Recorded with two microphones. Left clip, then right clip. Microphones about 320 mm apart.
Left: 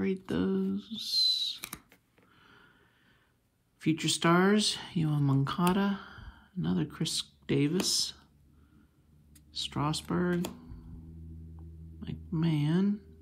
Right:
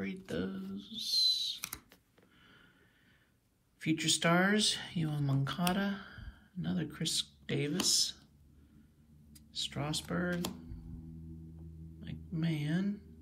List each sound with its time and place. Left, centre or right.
0.0 s owl: centre
2.4 s a sound: centre
3.8 s speech: centre
9.5 s speech: centre
12.0 s speech: centre